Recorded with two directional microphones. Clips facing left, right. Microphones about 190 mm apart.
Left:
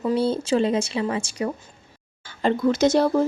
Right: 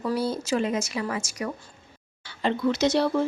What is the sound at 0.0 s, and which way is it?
Speech, 25° left (ahead or behind).